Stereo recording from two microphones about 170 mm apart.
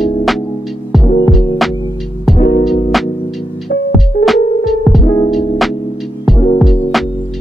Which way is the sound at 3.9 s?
Centre (ahead or behind).